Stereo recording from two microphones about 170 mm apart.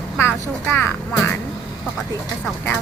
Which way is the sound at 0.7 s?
10° left (ahead or behind).